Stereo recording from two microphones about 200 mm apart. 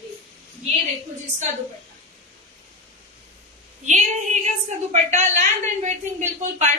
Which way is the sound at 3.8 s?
35° right (ahead or behind).